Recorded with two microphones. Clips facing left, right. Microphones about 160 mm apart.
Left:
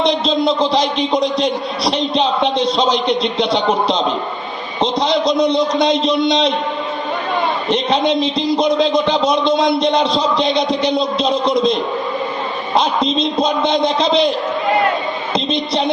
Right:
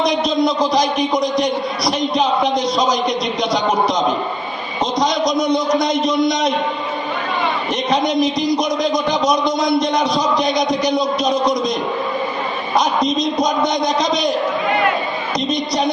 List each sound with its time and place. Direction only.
0.0 s a man's voice: 30° left (ahead or behind)
7.7 s a man's voice: 30° left (ahead or behind)
15.4 s a man's voice: 25° left (ahead or behind)